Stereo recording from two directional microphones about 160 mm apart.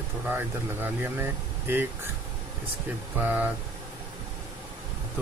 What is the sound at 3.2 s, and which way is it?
Speech, 10° right (ahead or behind).